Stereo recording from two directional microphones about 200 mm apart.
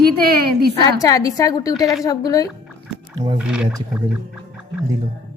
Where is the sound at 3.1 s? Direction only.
20° right (ahead or behind).